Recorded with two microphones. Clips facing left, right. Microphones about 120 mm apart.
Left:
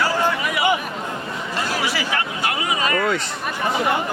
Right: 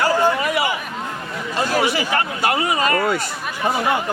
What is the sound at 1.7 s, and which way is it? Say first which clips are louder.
Chatter: right 7 dB; 45° right (ahead or behind).